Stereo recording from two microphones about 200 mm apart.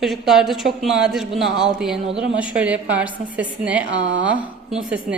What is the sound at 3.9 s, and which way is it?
Speech, 65° right (ahead or behind).